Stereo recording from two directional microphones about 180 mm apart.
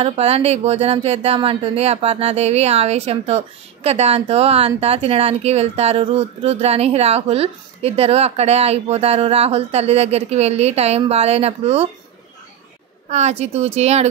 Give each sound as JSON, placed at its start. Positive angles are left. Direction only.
{"t": 0.0, "sound": "speech", "side_deg": -35}
{"t": 13.1, "sound": "speech", "side_deg": -35}